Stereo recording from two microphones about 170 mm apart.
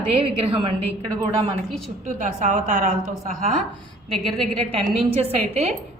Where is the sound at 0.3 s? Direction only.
35° right (ahead or behind).